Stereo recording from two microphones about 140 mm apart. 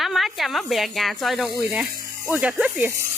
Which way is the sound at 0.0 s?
Centre (ahead or behind).